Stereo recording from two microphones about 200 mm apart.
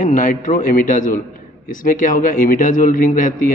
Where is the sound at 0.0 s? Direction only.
40° left (ahead or behind).